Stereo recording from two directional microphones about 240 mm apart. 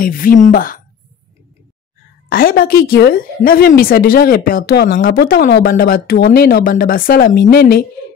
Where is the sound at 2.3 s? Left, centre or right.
Left.